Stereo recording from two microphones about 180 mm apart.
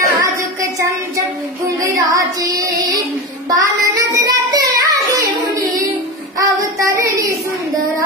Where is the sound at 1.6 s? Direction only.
20° right (ahead or behind).